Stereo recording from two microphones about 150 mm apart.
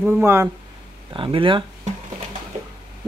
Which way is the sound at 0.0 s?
15° right (ahead or behind).